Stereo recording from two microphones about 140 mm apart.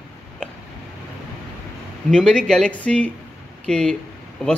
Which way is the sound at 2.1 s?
5° left (ahead or behind).